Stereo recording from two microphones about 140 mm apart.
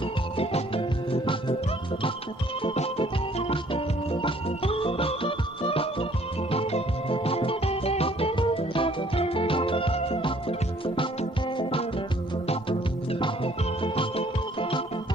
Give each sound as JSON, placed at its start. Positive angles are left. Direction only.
{"t": 0.3, "sound": "music", "side_deg": 40}
{"t": 2.7, "sound": "organ", "side_deg": 45}
{"t": 6.5, "sound": "music", "side_deg": 45}